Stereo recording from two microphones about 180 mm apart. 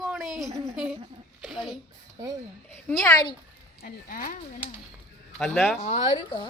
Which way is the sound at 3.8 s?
50° left (ahead or behind).